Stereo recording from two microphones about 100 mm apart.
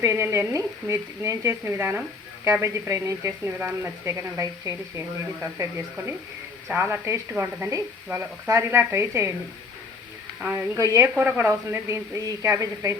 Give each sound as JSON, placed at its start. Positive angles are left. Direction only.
{"t": 0.0, "sound": "speech", "side_deg": -30}
{"t": 3.6, "sound": "speech", "side_deg": -15}
{"t": 4.0, "sound": "speech", "side_deg": -30}
{"t": 10.8, "sound": "speech", "side_deg": -30}